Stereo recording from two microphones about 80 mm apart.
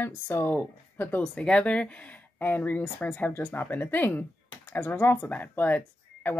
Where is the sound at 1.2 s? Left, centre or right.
Centre.